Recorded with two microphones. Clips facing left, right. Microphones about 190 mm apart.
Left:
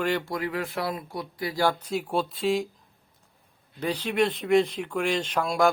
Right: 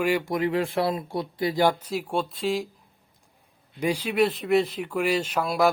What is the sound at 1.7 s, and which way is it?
Speech, 5° right (ahead or behind).